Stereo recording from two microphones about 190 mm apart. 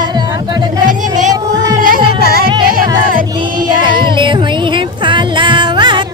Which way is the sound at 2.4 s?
25° right (ahead or behind).